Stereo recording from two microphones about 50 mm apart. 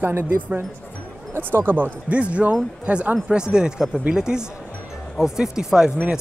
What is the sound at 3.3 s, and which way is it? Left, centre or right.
Speech, centre.